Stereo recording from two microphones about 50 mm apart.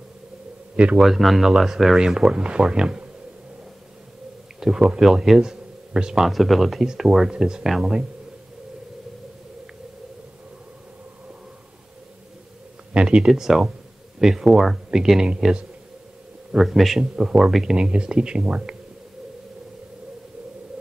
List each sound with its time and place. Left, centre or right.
0.7 s speech: right
1.0 s speech: centre
4.6 s speech: centre
5.0 s a man's voice: centre
6.3 s speech: centre
12.9 s a sound: centre
13.3 s speech: centre
16.5 s speech: centre
17.0 s speech: centre